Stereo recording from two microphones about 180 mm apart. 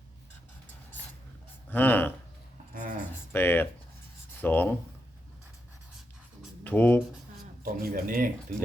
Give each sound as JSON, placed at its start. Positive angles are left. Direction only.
{"t": 1.7, "sound": "speech", "side_deg": 10}
{"t": 2.7, "sound": "a sound", "side_deg": -45}
{"t": 3.3, "sound": "speech", "side_deg": 10}
{"t": 6.7, "sound": "speech", "side_deg": 10}
{"t": 7.6, "sound": "speech", "side_deg": -55}